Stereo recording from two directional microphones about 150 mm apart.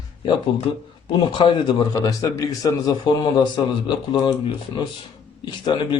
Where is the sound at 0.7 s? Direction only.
35° left (ahead or behind).